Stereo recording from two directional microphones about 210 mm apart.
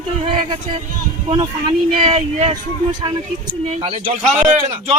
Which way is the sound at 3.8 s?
25° right (ahead or behind).